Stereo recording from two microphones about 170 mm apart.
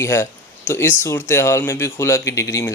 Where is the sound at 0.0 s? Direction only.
15° left (ahead or behind).